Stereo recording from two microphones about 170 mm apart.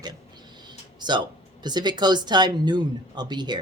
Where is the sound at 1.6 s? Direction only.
25° right (ahead or behind).